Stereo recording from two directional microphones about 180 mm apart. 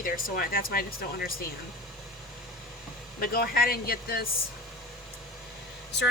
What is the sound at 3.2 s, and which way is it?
Speech, 55° left (ahead or behind).